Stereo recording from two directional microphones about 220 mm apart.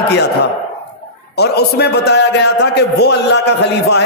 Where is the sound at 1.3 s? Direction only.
50° left (ahead or behind).